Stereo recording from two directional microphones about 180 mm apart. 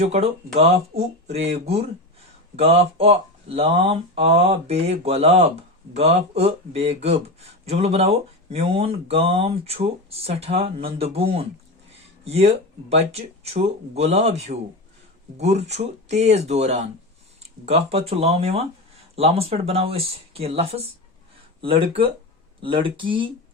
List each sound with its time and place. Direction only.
0.1 s speech: 35° right (ahead or behind)